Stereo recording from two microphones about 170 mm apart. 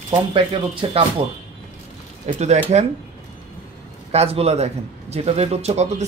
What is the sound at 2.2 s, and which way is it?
Speech, 40° right (ahead or behind).